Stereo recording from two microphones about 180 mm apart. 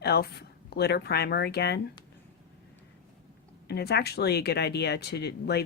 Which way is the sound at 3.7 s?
65° left (ahead or behind).